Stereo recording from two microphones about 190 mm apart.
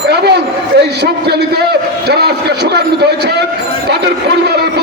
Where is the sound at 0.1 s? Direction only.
60° right (ahead or behind).